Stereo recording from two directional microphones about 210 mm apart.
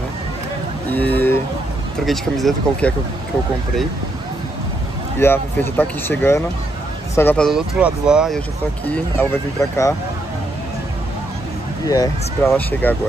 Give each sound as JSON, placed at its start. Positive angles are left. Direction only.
{"t": 0.9, "sound": "a sound", "side_deg": 10}
{"t": 2.0, "sound": "speech", "side_deg": 0}
{"t": 5.2, "sound": "speech", "side_deg": 10}
{"t": 9.6, "sound": "speech", "side_deg": 15}
{"t": 11.8, "sound": "speech", "side_deg": 15}